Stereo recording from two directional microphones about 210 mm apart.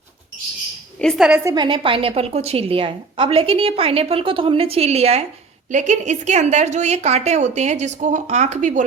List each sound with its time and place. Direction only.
0.9 s a woman's voice: centre (ahead or behind)
1.5 s a woman's voice: 20° right (ahead or behind)